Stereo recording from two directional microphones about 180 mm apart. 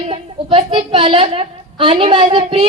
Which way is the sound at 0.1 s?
30° right (ahead or behind).